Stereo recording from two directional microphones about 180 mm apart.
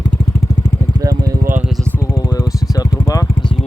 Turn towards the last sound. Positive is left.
turn(degrees=20)  # may be behind; listen again after turning